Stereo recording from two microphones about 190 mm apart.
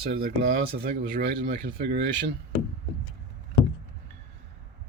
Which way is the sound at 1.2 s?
70° right (ahead or behind).